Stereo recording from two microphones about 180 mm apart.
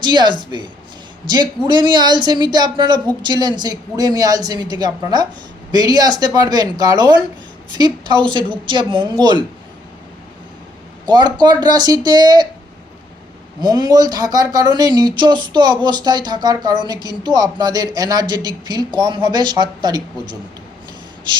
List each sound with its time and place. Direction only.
0.0 s speech: 25° right (ahead or behind)
11.0 s speech: 25° right (ahead or behind)
13.6 s speech: 20° right (ahead or behind)